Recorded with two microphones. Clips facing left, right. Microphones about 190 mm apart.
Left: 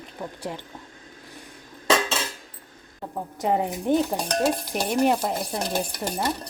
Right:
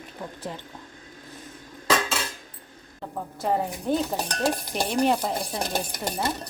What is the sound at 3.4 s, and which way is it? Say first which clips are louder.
Speech: left 2 dB; 15° left (ahead or behind).